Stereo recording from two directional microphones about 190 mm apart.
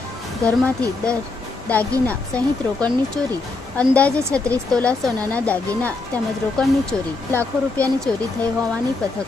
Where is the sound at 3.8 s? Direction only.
5° left (ahead or behind).